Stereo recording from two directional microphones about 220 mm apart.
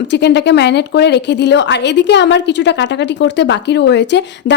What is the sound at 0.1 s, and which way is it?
A woman's voice, 50° left (ahead or behind).